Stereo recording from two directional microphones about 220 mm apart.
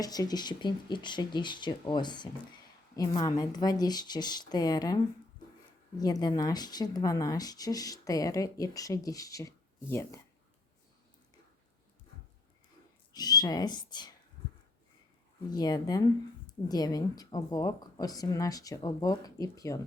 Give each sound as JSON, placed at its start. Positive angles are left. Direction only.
{"t": 0.0, "sound": "speech", "side_deg": 15}
{"t": 6.0, "sound": "speech", "side_deg": 15}
{"t": 13.1, "sound": "speech", "side_deg": 20}
{"t": 15.4, "sound": "speech", "side_deg": 15}